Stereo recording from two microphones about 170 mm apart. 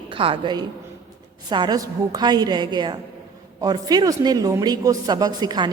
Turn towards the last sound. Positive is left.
turn(degrees=-25)  # may be behind; listen again after turning